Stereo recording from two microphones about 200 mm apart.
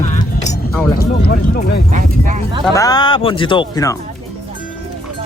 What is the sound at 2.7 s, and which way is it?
Speech, 20° left (ahead or behind).